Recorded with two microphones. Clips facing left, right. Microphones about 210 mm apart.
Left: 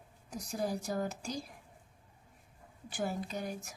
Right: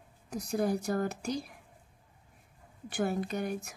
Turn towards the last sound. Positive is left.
turn(degrees=-60)  # may be behind; listen again after turning